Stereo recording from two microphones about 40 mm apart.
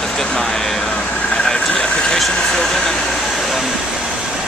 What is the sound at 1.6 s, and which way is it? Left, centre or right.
Speech, left.